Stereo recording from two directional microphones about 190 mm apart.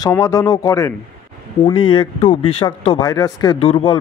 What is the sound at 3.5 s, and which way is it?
Speech, 30° left (ahead or behind).